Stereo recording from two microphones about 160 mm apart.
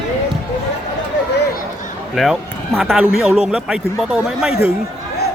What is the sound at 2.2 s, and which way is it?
Speech, centre (ahead or behind).